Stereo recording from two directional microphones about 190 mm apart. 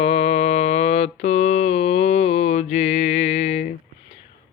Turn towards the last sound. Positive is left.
turn(degrees=35)  # may be behind; listen again after turning